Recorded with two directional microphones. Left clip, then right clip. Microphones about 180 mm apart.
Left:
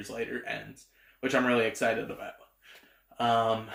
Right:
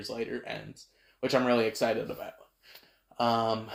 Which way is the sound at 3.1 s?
35° right (ahead or behind).